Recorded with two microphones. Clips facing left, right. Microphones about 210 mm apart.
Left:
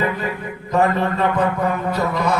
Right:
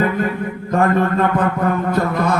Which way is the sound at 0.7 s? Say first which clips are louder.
Right 2 dB; 50° right (ahead or behind).